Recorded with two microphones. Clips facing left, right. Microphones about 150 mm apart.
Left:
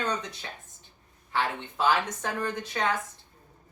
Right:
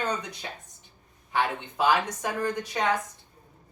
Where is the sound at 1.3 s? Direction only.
15° right (ahead or behind).